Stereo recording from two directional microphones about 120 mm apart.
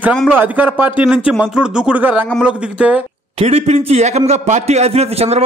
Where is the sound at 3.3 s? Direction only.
60° right (ahead or behind).